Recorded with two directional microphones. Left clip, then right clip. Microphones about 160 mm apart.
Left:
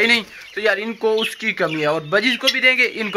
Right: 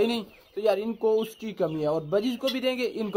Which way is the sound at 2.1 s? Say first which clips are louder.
Left 9 dB; 5° right (ahead or behind).